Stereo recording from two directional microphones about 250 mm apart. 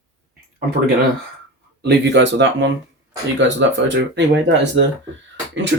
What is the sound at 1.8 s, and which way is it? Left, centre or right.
Speech, right.